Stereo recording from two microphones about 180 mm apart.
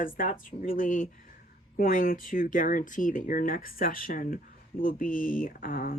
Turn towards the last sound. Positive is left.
turn(degrees=50)  # may be behind; listen again after turning